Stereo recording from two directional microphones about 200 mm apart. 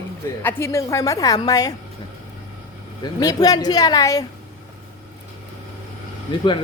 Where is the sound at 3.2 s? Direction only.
20° left (ahead or behind).